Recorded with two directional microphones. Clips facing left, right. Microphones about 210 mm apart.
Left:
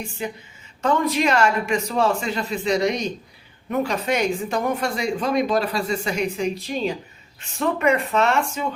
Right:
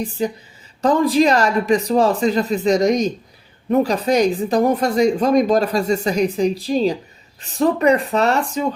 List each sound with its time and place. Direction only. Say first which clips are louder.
0.2 s speech: right 7 dB; 35° right (ahead or behind)